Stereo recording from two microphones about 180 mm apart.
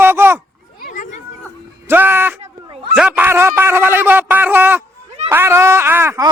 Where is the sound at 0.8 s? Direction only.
50° left (ahead or behind).